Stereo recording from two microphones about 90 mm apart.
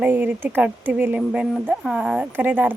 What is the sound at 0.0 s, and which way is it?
Speech, 20° right (ahead or behind).